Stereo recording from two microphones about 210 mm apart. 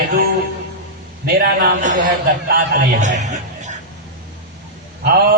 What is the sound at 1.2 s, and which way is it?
A man's voice, 45° right (ahead or behind).